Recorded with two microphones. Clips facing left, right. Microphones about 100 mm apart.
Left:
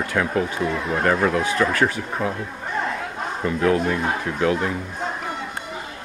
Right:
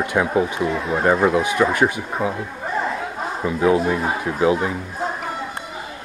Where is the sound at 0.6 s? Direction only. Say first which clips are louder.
Right 2 dB; centre (ahead or behind).